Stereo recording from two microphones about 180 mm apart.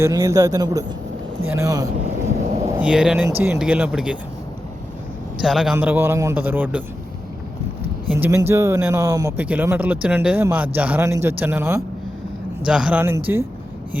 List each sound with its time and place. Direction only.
0.0 s a man's voice: 20° right (ahead or behind)
5.4 s a man's voice: centre (ahead or behind)
8.1 s speech: 15° right (ahead or behind)